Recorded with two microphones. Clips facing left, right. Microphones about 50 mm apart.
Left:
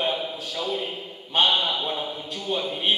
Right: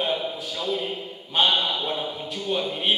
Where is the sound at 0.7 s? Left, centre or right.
Centre.